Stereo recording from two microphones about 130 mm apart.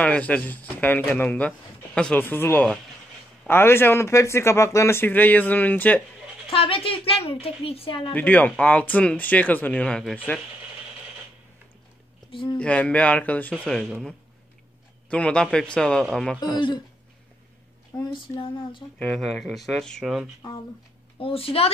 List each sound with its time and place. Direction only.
0.0 s speech: 10° left (ahead or behind)
6.5 s a woman's voice: 45° left (ahead or behind)
8.1 s speech: 10° left (ahead or behind)
12.3 s speech: 40° left (ahead or behind)
12.5 s speech: 10° left (ahead or behind)
15.0 s speech: 10° left (ahead or behind)
16.5 s a sound: 35° left (ahead or behind)
18.1 s a sound: 40° left (ahead or behind)
18.9 s speech: 5° left (ahead or behind)
21.2 s a woman's voice: 45° left (ahead or behind)